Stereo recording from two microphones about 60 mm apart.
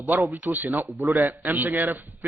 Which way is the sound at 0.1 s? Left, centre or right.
Right.